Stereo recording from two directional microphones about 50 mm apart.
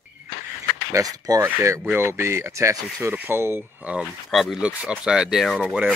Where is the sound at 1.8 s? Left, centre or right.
Right.